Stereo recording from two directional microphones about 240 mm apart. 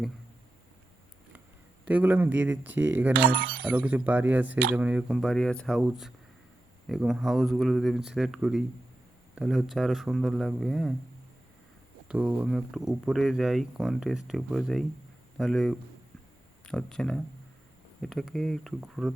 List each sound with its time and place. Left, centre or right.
1.8 s speech: centre
3.3 s speech: right
3.6 s speech: centre
12.0 s speech: centre